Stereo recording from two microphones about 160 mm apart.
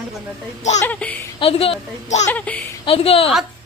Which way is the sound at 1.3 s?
35° left (ahead or behind).